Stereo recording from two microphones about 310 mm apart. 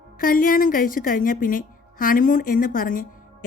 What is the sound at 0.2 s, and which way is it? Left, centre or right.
A woman's voice, left.